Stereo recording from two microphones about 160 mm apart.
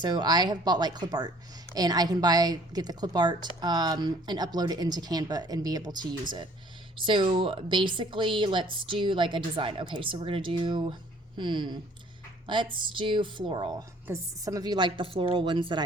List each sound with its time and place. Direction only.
0.0 s speech: 25° right (ahead or behind)